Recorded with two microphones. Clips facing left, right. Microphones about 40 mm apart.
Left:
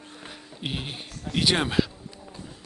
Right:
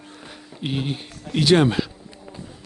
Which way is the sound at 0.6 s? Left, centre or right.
Centre.